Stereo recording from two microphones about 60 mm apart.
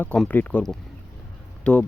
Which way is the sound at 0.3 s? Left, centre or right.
Left.